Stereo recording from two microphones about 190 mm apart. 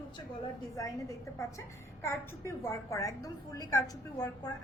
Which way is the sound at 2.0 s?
15° left (ahead or behind).